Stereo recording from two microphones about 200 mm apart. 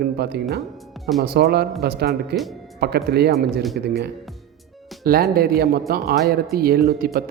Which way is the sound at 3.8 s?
55° right (ahead or behind).